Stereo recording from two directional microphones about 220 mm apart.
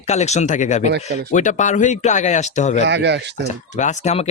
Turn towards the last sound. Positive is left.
turn(degrees=30)  # may be behind; listen again after turning